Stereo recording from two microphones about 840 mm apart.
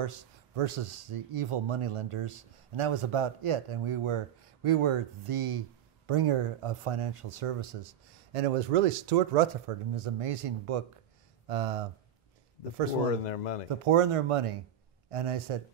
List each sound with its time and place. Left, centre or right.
0.0 s speech: right
13.2 s speech: left
13.7 s speech: right